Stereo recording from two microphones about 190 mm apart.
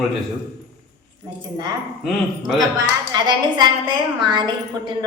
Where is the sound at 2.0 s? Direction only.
Centre (ahead or behind).